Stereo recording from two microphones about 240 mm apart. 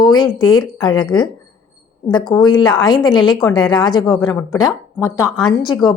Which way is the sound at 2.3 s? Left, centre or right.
Centre.